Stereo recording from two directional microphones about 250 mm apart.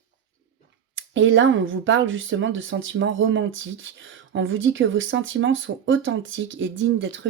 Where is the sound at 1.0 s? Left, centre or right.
Right.